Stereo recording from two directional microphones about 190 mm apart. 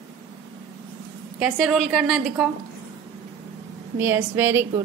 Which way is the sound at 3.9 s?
10° right (ahead or behind).